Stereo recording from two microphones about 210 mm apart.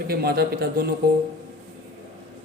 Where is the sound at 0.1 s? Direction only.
45° right (ahead or behind).